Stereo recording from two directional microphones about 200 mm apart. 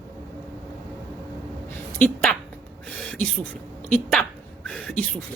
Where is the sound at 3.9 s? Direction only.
5° left (ahead or behind).